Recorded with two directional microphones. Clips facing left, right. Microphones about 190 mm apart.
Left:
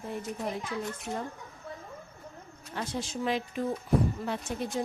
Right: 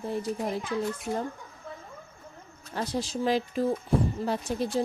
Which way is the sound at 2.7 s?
35° right (ahead or behind).